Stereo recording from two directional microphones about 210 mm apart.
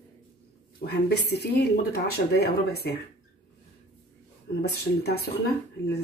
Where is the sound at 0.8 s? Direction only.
50° left (ahead or behind).